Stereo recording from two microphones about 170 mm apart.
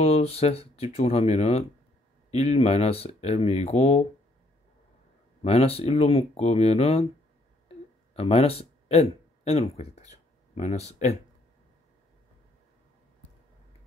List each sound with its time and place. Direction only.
0.0 s speech: 35° left (ahead or behind)
5.4 s speech: 35° left (ahead or behind)
7.6 s a sound: 35° left (ahead or behind)